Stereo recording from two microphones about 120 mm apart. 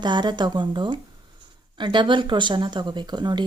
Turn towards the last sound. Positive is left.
turn(degrees=-35)  # may be behind; listen again after turning